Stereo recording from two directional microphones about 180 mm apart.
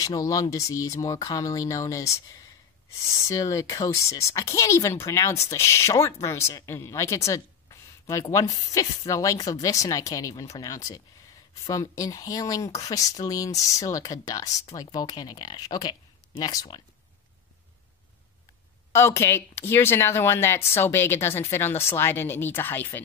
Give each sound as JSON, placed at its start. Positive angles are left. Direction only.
{"t": 0.0, "sound": "speech", "side_deg": 20}
{"t": 3.3, "sound": "speech", "side_deg": 20}
{"t": 18.9, "sound": "speech", "side_deg": 15}